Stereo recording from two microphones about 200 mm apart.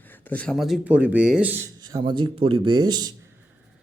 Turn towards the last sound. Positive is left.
turn(degrees=-20)  # may be behind; listen again after turning